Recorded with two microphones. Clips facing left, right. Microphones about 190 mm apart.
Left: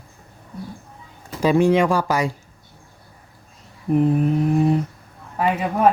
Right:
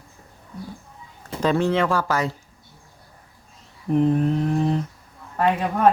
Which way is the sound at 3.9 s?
5° left (ahead or behind).